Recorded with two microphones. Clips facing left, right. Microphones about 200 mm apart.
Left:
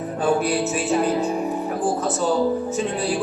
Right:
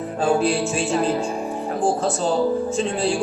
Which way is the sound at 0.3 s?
30° right (ahead or behind).